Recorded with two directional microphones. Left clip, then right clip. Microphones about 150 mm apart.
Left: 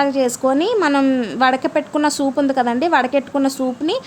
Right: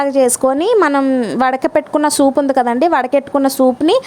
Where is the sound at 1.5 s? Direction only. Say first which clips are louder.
Even; 50° right (ahead or behind).